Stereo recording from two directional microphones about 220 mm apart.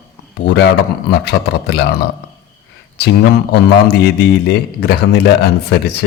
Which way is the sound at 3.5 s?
45° left (ahead or behind).